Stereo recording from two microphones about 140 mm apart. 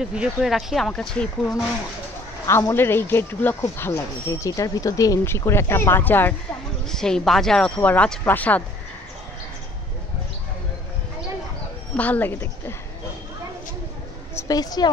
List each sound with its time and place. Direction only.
0.0 s speech: 5° right (ahead or behind)
2.4 s speech: 20° left (ahead or behind)
6.9 s speech: 5° left (ahead or behind)
12.0 s speech: 10° left (ahead or behind)
14.3 s a woman's voice: 25° left (ahead or behind)